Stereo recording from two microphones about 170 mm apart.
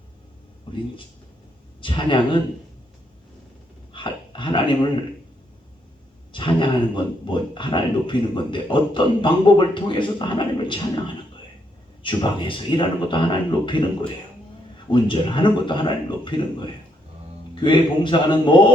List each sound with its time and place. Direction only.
1.8 s speech: 30° left (ahead or behind)
3.9 s dog: 30° left (ahead or behind)
6.3 s a man's voice: 30° left (ahead or behind)
12.0 s speech: 30° left (ahead or behind)
14.9 s speech: 30° left (ahead or behind)